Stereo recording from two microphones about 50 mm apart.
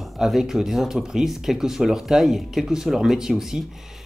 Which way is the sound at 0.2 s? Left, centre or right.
Centre.